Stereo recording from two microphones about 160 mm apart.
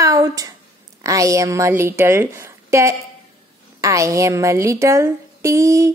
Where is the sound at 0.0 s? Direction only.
20° right (ahead or behind).